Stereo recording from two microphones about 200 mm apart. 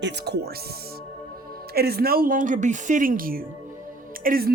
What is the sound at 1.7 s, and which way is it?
A woman's voice, 50° right (ahead or behind).